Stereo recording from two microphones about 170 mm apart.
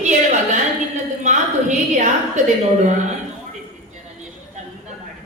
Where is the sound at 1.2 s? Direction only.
45° right (ahead or behind).